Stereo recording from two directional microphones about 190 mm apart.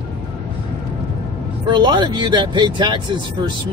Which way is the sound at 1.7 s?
25° right (ahead or behind).